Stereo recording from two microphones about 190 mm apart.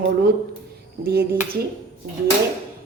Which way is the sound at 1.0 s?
55° right (ahead or behind).